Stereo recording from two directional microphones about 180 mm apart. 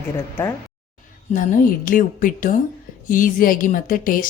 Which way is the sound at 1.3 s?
45° left (ahead or behind).